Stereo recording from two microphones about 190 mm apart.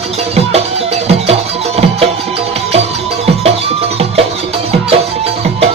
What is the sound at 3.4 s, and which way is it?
Music, 30° right (ahead or behind).